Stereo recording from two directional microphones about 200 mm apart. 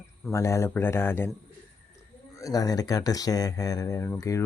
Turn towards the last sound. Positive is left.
turn(degrees=15)  # may be behind; listen again after turning